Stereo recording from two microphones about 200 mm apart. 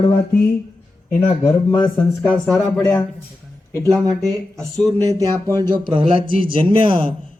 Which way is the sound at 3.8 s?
15° right (ahead or behind).